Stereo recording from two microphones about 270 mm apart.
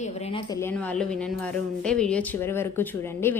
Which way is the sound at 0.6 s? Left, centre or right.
Centre.